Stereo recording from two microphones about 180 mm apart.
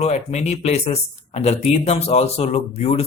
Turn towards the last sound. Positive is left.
turn(degrees=35)  # may be behind; listen again after turning